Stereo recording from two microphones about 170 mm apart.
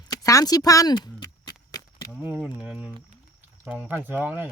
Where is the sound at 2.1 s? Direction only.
10° right (ahead or behind).